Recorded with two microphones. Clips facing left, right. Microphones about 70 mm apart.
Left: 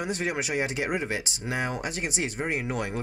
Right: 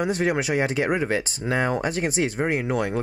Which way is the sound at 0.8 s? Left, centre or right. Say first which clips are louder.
Right 6 dB; right.